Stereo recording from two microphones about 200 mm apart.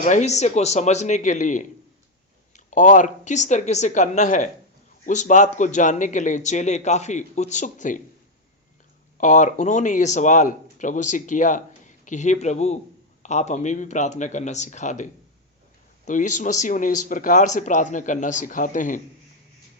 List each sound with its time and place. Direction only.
0.0 s speech: 35° left (ahead or behind)
2.6 s speech: 40° left (ahead or behind)
9.1 s speech: 40° left (ahead or behind)